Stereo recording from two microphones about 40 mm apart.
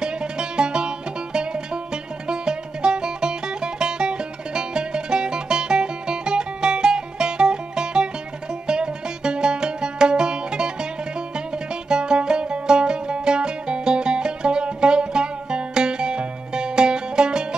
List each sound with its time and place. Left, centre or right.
0.0 s music: right